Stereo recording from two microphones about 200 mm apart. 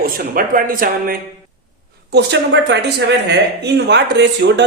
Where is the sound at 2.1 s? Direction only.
60° right (ahead or behind).